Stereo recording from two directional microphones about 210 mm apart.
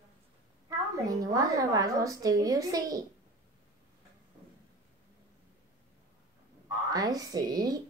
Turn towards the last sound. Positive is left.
turn(degrees=-20)  # may be behind; listen again after turning